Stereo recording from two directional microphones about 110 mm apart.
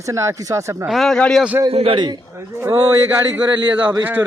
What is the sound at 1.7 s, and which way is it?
Speech, 65° right (ahead or behind).